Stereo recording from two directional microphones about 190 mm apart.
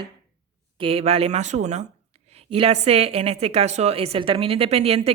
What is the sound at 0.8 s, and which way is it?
A woman's voice, 30° right (ahead or behind).